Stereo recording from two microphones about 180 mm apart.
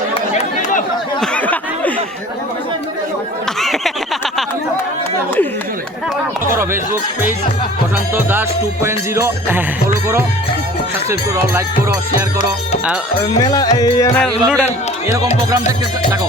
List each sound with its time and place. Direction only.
1.2 s a sound: 5° left (ahead or behind)
3.6 s a sound: centre (ahead or behind)
6.5 s speech: 15° right (ahead or behind)
8.1 s music: 10° right (ahead or behind)
11.1 s music: 15° right (ahead or behind)
13.5 s music: 20° left (ahead or behind)
14.2 s speech: 5° left (ahead or behind)